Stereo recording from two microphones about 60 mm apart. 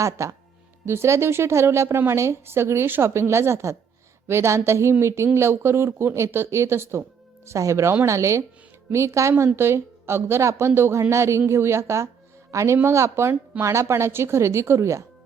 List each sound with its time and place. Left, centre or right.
0.0 s speech: right
7.4 s speech: right
9.6 s speech: right
11.1 s speech: right